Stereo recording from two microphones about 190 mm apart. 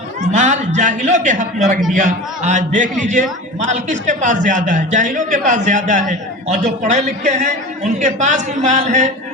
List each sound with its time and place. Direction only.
0.3 s a man's voice: 40° right (ahead or behind)